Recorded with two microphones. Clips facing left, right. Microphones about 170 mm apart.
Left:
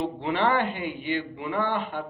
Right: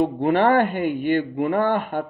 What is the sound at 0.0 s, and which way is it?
Speech, 50° right (ahead or behind).